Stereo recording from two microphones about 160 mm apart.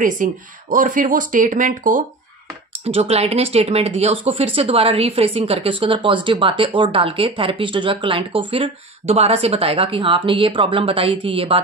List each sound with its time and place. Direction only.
0.0 s speech: 55° right (ahead or behind)
2.8 s speech: 40° right (ahead or behind)